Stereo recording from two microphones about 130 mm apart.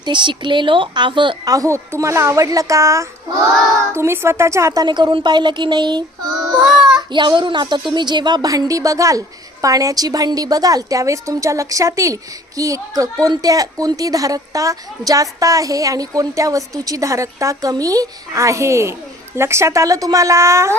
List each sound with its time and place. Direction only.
0.0 s a woman's voice: 35° right (ahead or behind)
6.6 s speech: centre (ahead or behind)
7.1 s a woman's voice: 35° right (ahead or behind); by 20.7 s 20° right (ahead or behind)